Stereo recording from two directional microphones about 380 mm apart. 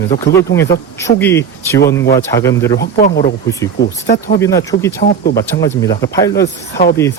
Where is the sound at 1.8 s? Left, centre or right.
Left.